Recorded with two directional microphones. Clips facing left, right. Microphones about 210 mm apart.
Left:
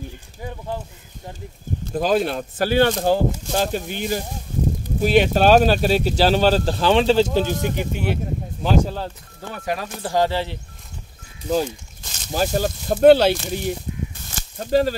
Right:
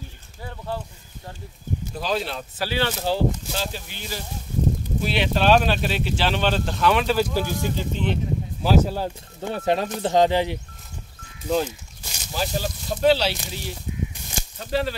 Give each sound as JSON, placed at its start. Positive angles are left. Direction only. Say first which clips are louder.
{"t": 0.4, "sound": "a sound", "louder": "left 2 dB", "side_deg": 15}
{"t": 1.9, "sound": "speech", "louder": "left 8 dB", "side_deg": 50}
{"t": 8.6, "sound": "speech", "louder": "even", "side_deg": -5}
{"t": 9.7, "sound": "speech", "louder": "right 2 dB", "side_deg": -25}
{"t": 11.4, "sound": "speech", "louder": "left 2 dB", "side_deg": 10}
{"t": 12.3, "sound": "speech", "louder": "left 6 dB", "side_deg": 50}